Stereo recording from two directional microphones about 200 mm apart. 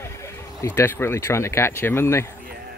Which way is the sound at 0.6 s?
15° left (ahead or behind).